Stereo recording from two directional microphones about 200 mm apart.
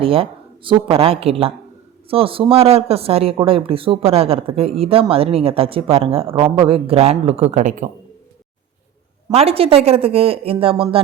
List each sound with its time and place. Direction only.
0.0 s speech: 25° right (ahead or behind)
9.3 s speech: 30° right (ahead or behind)